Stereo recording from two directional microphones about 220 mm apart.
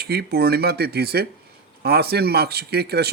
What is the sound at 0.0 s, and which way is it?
A man's voice, 45° right (ahead or behind).